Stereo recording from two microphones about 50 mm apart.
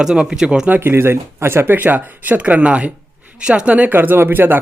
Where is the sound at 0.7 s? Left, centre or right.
Right.